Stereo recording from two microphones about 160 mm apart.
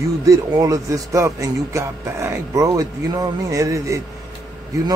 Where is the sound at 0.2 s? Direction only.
20° right (ahead or behind).